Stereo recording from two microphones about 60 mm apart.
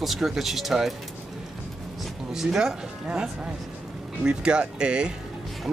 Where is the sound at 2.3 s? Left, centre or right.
Centre.